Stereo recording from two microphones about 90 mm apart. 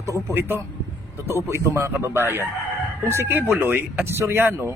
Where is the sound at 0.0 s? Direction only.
35° right (ahead or behind).